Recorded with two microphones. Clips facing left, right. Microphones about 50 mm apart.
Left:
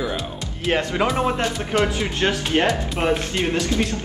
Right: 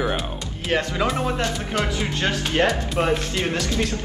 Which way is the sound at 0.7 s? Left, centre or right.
Left.